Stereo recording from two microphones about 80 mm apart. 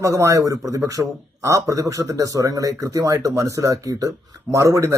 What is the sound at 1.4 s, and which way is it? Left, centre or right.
A man's voice, right.